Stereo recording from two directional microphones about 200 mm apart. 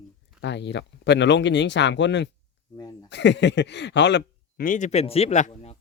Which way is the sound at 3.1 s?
60° left (ahead or behind).